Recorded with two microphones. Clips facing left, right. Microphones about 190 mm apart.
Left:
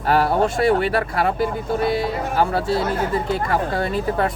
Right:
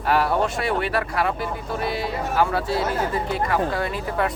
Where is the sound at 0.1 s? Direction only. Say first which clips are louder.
Left 3 dB; 30° left (ahead or behind).